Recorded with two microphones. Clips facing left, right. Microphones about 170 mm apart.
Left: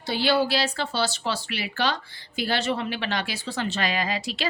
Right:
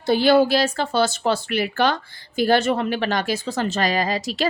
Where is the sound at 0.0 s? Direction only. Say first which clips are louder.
Right 7 dB; 50° right (ahead or behind).